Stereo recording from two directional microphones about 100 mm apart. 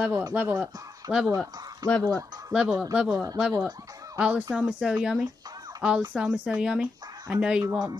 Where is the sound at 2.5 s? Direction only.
10° right (ahead or behind).